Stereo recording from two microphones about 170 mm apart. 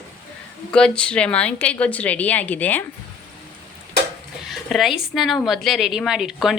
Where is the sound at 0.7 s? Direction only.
5° left (ahead or behind).